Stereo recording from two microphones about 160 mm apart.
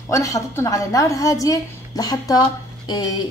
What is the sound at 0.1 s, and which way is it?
A woman's voice, 20° left (ahead or behind).